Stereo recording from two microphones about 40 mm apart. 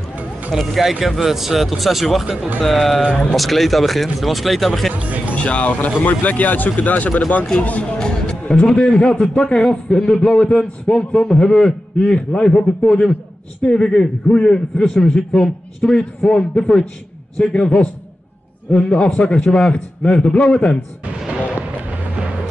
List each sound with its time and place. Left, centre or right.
0.5 s a man's voice: centre
4.9 s speech: right
5.3 s speech: left
5.7 s speech: left
7.1 s speech: left
8.0 s a man's voice: centre
11.2 s a man's voice: centre